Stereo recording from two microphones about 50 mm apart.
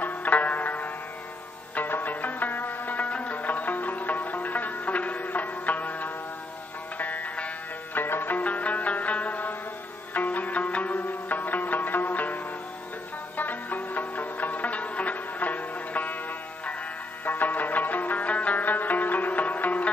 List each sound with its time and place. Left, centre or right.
0.0 s music: left
7.9 s music: left
13.4 s zither: left
17.2 s music: left